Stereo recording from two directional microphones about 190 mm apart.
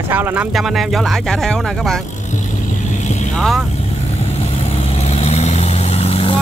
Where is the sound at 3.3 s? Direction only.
Centre (ahead or behind).